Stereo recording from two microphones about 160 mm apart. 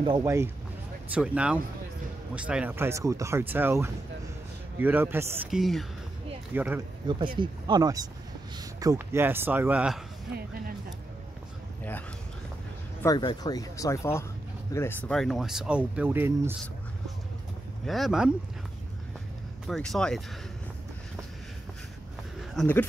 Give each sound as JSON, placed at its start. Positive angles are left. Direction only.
{"t": 0.0, "sound": "speech", "side_deg": -25}
{"t": 1.1, "sound": "speech", "side_deg": -5}
{"t": 5.5, "sound": "speech", "side_deg": 0}
{"t": 6.5, "sound": "speech", "side_deg": -10}
{"t": 7.3, "sound": "speech", "side_deg": -25}
{"t": 10.3, "sound": "speech", "side_deg": -70}
{"t": 13.0, "sound": "speech", "side_deg": 25}
{"t": 17.8, "sound": "speech", "side_deg": 0}
{"t": 19.7, "sound": "speech", "side_deg": 5}
{"t": 22.6, "sound": "speech", "side_deg": 0}